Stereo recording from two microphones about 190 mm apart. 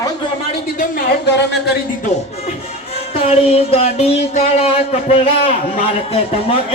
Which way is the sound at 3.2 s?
30° left (ahead or behind).